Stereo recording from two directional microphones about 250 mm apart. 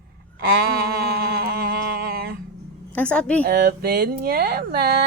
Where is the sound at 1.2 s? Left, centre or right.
Right.